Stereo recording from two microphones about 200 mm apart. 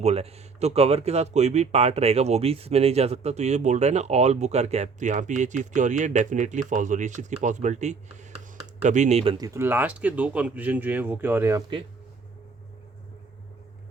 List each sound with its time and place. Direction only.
0.0 s speech: 30° right (ahead or behind)
9.4 s speech: 15° right (ahead or behind)